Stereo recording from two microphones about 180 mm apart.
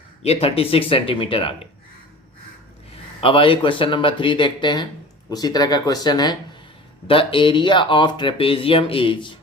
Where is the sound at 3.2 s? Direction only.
30° left (ahead or behind).